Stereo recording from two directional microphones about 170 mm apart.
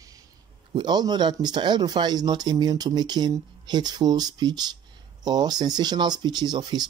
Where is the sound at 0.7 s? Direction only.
25° right (ahead or behind).